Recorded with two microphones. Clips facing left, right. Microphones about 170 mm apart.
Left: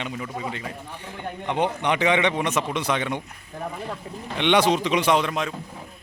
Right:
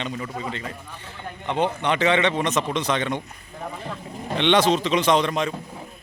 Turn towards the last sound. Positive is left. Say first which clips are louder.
# right 1 dB
turn(degrees=5)  # may be behind; listen again after turning